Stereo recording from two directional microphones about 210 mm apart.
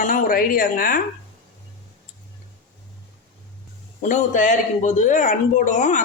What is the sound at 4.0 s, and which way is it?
Speech, 35° left (ahead or behind).